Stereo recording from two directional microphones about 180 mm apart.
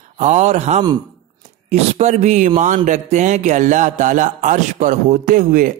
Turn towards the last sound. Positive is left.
turn(degrees=-45)  # may be behind; listen again after turning